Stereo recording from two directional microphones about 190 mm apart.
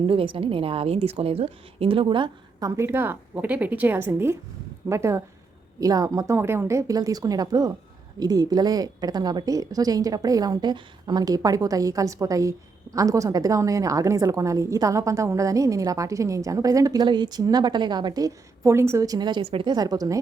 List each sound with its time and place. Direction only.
0.1 s speech: 30° right (ahead or behind)